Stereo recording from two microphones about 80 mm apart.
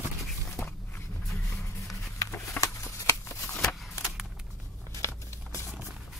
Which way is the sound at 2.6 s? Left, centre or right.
Left.